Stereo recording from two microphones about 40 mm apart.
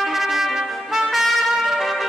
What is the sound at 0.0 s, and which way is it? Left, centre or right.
Trumpet, centre.